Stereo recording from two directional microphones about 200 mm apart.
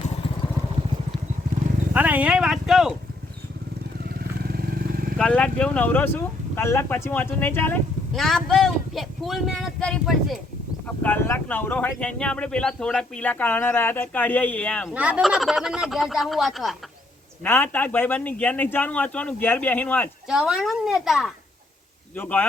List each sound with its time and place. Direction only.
1.9 s speech: 5° right (ahead or behind)
4.4 s vehicle: 50° right (ahead or behind)
5.1 s speech: 5° left (ahead or behind)
14.9 s speech: 5° right (ahead or behind)
17.4 s speech: 10° left (ahead or behind)
20.2 s speech: 5° right (ahead or behind)
22.1 s speech: 10° left (ahead or behind)